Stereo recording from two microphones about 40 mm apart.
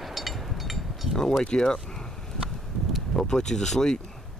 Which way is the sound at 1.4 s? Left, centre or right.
Centre.